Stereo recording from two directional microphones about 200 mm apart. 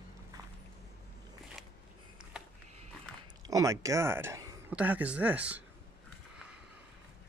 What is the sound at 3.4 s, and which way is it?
Speech, 15° right (ahead or behind).